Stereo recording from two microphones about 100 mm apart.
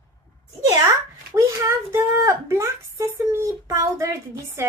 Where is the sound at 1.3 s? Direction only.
30° right (ahead or behind).